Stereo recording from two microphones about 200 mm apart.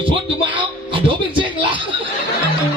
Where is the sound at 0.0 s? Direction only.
25° right (ahead or behind).